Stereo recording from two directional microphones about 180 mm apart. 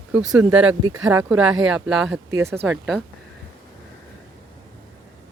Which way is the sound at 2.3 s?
15° right (ahead or behind).